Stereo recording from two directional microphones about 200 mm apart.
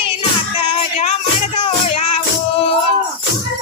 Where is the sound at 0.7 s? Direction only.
30° left (ahead or behind).